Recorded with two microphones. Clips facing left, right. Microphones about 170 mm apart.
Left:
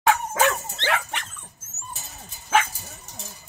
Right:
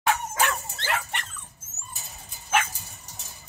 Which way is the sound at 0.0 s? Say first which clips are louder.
Left 5 dB; 70° left (ahead or behind).